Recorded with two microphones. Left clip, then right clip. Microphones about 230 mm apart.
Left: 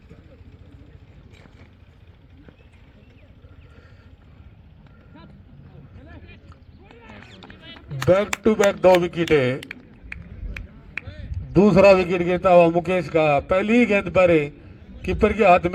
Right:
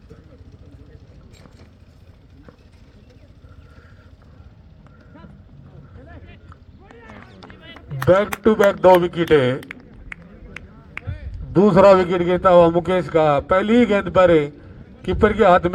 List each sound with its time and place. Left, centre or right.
8.0 s a man's voice: left
11.3 s a man's voice: left